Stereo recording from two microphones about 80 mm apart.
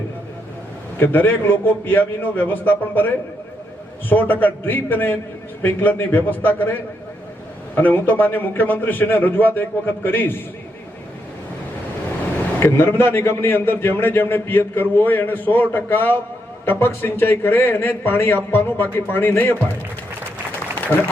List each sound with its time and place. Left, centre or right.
0.9 s a man's voice: left
4.1 s a man's voice: left
7.8 s a man's voice: left
12.5 s a man's voice: left